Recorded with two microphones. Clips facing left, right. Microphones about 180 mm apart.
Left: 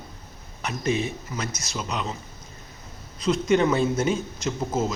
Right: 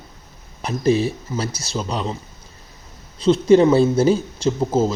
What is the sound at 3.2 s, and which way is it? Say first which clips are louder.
A man's voice: right 8 dB; 30° right (ahead or behind).